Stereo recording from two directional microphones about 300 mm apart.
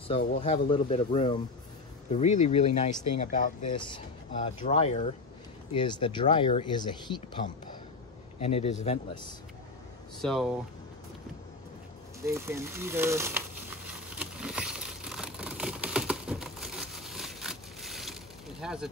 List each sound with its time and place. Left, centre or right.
0.1 s speech: left
7.4 s speech: left
10.2 s speech: centre
12.2 s crumpling: centre